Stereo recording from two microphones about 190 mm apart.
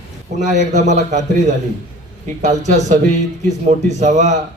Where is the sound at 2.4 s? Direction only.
40° right (ahead or behind).